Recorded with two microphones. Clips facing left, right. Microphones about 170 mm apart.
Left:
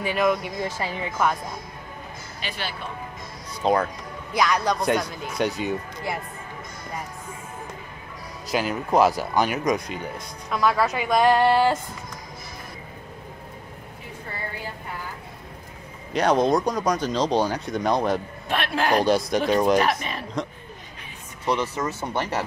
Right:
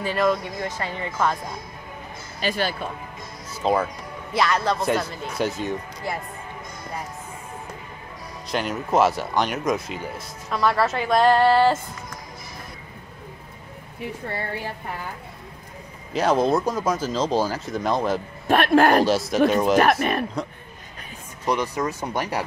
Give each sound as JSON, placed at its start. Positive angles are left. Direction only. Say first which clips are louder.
{"t": 0.0, "sound": "speech", "louder": "even", "side_deg": 5}
{"t": 2.4, "sound": "a man's voice", "louder": "right 8 dB", "side_deg": -45}
{"t": 3.6, "sound": "speech", "louder": "even", "side_deg": -5}
{"t": 8.5, "sound": "speech", "louder": "left 1 dB", "side_deg": 0}
{"t": 16.1, "sound": "speech", "louder": "even", "side_deg": -5}
{"t": 18.5, "sound": "a man's voice", "louder": "right 6 dB", "side_deg": -50}
{"t": 19.0, "sound": "speech", "louder": "right 1 dB", "side_deg": -5}
{"t": 19.8, "sound": "speech", "louder": "right 5 dB", "side_deg": -55}
{"t": 21.5, "sound": "speech", "louder": "right 1 dB", "side_deg": -10}